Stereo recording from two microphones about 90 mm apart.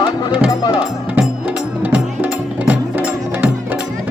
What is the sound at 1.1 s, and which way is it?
Music, 15° right (ahead or behind).